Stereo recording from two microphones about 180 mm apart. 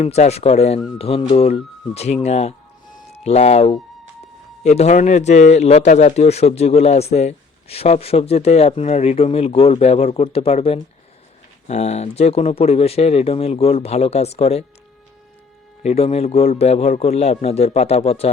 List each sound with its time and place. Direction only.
0.0 s a man's voice: 35° left (ahead or behind)
15.8 s a man's voice: 35° left (ahead or behind)